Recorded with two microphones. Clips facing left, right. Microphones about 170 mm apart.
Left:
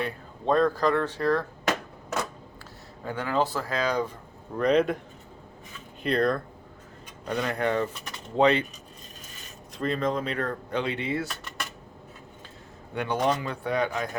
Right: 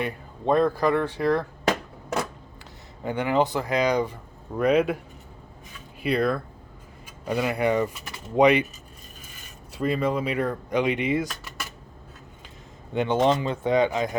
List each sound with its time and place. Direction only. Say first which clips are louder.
0.0 s speech: right 2 dB; 10° right (ahead or behind)
3.0 s speech: right 4 dB; 20° right (ahead or behind)
6.0 s speech: right 1 dB; 5° right (ahead or behind)
9.7 s speech: right 3 dB; 10° right (ahead or behind)
12.9 s speech: right 5 dB; 20° right (ahead or behind)